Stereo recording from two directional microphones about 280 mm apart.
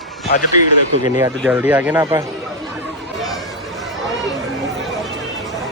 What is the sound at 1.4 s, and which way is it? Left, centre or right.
Speech, centre.